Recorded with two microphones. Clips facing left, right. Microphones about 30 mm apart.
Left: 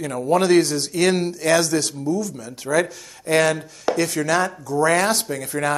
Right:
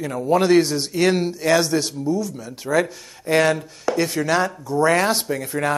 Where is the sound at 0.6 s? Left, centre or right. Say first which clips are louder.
Even; centre.